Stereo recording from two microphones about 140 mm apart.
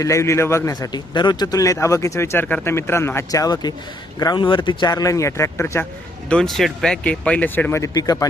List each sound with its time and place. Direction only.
0.0 s a man's voice: 20° left (ahead or behind)
6.2 s speech: 5° left (ahead or behind); by 8.3 s 25° left (ahead or behind)